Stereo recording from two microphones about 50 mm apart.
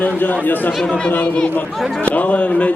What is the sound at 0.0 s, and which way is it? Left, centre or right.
Speech, left.